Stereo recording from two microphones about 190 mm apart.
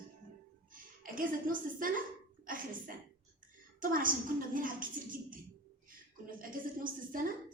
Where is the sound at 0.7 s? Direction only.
45° right (ahead or behind).